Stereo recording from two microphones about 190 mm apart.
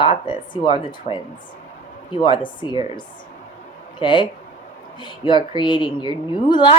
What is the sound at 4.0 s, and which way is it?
A woman's voice, 25° left (ahead or behind).